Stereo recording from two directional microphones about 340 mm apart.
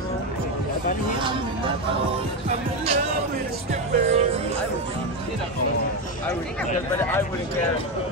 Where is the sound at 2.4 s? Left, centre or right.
Centre.